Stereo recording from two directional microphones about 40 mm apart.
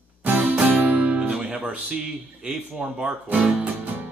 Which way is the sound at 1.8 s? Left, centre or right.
Centre.